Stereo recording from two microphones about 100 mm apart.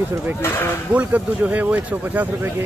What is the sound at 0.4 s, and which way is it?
Speech, 20° left (ahead or behind).